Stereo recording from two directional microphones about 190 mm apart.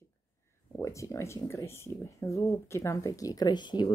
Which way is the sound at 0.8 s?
15° left (ahead or behind).